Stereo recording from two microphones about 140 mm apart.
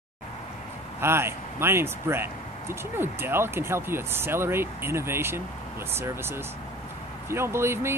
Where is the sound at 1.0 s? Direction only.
15° right (ahead or behind).